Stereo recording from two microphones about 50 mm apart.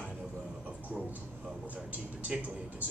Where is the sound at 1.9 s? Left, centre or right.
Right.